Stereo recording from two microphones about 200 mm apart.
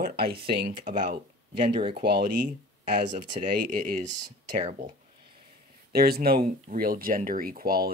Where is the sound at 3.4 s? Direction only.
40° right (ahead or behind).